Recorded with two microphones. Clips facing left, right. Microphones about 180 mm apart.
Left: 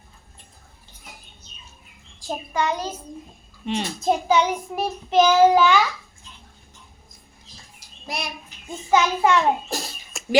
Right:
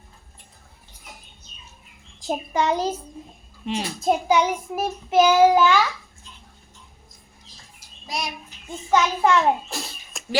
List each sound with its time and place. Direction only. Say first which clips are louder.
2.2 s a child's voice: right 2 dB; 25° right (ahead or behind)
3.7 s child singing: even; 5° right (ahead or behind)
8.0 s speech: right 1 dB; 60° left (ahead or behind)
8.9 s child singing: left 1 dB; 5° left (ahead or behind)
10.1 s a sound: left 2 dB; centre (ahead or behind)